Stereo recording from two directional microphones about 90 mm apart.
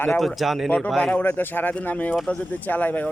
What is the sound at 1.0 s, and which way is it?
Speech, 20° left (ahead or behind).